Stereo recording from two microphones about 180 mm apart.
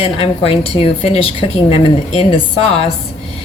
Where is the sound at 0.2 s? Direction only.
35° left (ahead or behind).